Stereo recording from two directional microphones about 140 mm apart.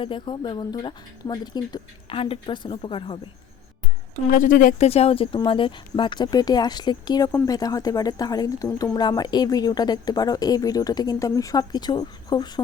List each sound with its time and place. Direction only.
0.0 s speech: 35° left (ahead or behind)
4.3 s a woman's voice: 70° left (ahead or behind)
4.9 s speech: 45° left (ahead or behind); by 12.6 s 30° left (ahead or behind)